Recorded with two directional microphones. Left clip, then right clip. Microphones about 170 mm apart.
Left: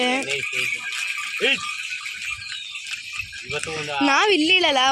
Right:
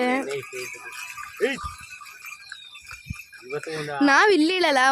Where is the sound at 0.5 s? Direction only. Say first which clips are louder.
Left 10 dB; 65° right (ahead or behind).